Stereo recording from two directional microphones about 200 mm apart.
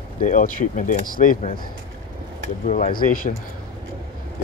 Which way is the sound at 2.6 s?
40° left (ahead or behind).